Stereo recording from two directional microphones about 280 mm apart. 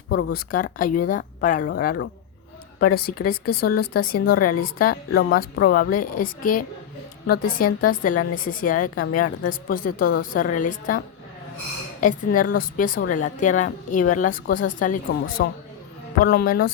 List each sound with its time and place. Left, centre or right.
0.1 s a woman's voice: left
3.1 s speech: left
3.6 s a woman's voice: left